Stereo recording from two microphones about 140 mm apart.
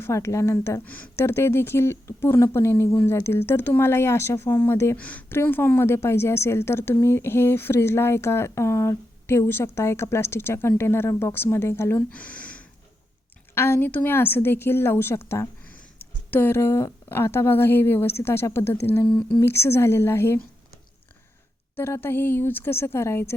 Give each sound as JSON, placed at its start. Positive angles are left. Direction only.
{"t": 0.0, "sound": "a woman's voice", "side_deg": 20}
{"t": 21.8, "sound": "speech", "side_deg": 15}